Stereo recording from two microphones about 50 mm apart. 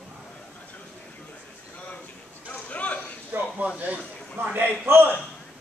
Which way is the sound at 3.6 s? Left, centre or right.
Right.